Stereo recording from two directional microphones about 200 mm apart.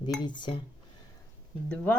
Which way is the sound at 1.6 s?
10° left (ahead or behind).